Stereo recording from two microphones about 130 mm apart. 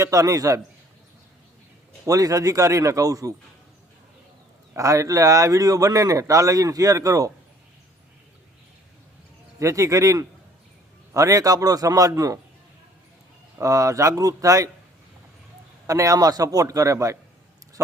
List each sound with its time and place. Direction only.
0.0 s speech: 25° right (ahead or behind)
2.0 s speech: 25° right (ahead or behind)
4.7 s speech: 25° right (ahead or behind)
9.6 s speech: 25° right (ahead or behind)
13.6 s speech: 25° right (ahead or behind)
15.9 s speech: 25° right (ahead or behind)